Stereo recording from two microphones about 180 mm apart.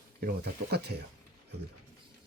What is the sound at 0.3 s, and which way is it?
Speech, 65° right (ahead or behind).